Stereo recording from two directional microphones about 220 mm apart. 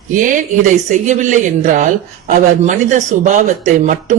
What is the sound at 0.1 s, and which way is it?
Speech, 35° right (ahead or behind).